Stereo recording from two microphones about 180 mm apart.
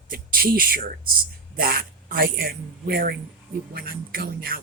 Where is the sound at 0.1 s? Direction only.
55° right (ahead or behind).